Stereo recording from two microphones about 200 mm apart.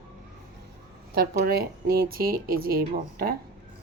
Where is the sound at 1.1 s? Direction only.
50° right (ahead or behind).